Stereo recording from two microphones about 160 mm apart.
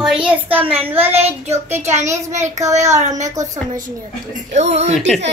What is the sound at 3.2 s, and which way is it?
Speech, 20° right (ahead or behind).